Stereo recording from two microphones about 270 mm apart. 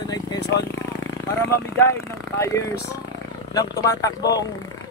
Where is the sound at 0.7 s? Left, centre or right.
Centre.